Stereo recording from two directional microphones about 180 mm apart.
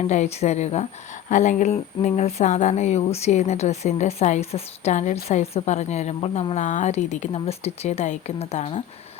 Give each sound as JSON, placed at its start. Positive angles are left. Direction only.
{"t": 0.0, "sound": "speech", "side_deg": 40}